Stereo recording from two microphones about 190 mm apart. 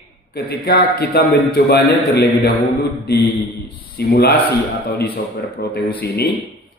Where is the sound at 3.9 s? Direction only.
55° left (ahead or behind).